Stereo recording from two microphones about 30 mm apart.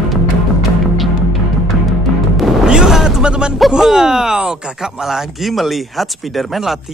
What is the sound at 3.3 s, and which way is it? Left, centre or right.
Music, right.